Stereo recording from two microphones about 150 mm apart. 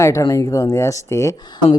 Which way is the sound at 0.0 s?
20° left (ahead or behind).